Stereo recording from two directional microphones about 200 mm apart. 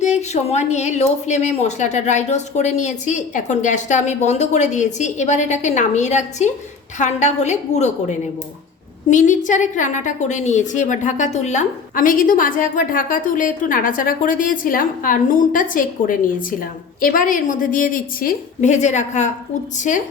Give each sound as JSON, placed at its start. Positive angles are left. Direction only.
{"t": 0.0, "sound": "a woman's voice", "side_deg": 35}